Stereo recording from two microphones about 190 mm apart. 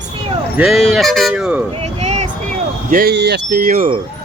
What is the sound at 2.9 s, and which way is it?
Speech, 55° right (ahead or behind).